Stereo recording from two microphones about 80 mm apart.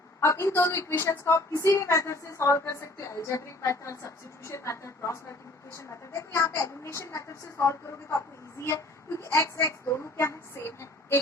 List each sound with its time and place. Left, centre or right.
0.2 s speech: left